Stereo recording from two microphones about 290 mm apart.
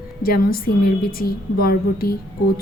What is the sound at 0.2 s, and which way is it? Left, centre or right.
A woman's voice, left.